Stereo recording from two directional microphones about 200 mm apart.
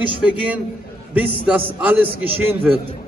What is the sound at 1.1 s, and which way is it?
A man's voice, 5° right (ahead or behind).